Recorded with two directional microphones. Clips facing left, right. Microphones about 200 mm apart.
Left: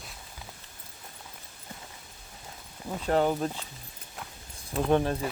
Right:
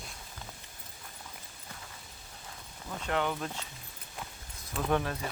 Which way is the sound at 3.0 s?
35° left (ahead or behind).